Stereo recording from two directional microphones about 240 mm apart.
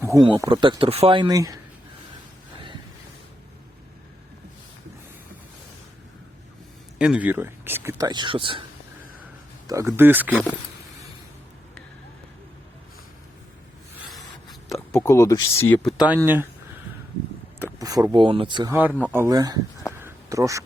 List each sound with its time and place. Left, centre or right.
0.0 s speech: centre
7.0 s speech: centre; by 8.6 s right
9.6 s speech: centre
14.7 s speech: centre
16.0 s speech: centre
17.6 s speech: centre
18.7 s speech: centre
20.0 s a sound: centre